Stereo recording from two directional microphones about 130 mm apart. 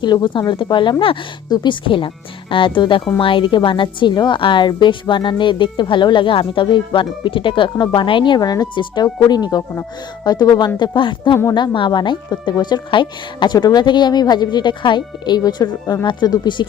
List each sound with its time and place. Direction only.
0.0 s a woman's voice: 35° left (ahead or behind)